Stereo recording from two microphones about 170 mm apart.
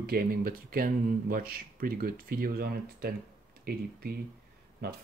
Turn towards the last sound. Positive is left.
turn(degrees=-65)  # may be behind; listen again after turning